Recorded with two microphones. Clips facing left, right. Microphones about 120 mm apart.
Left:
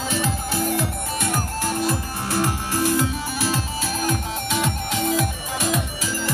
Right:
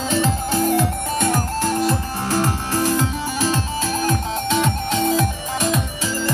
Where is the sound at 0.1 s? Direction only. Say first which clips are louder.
Right 6 dB; 15° left (ahead or behind).